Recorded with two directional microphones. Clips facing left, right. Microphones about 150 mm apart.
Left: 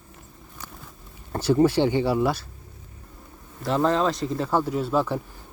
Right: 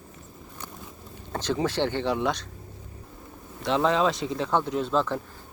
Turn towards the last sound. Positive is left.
turn(degrees=10)  # may be behind; listen again after turning